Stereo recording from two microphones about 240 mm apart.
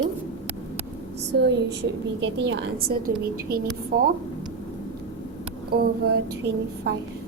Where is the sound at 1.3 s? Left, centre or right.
Right.